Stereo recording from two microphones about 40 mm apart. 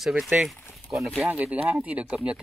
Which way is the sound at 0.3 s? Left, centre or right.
Right.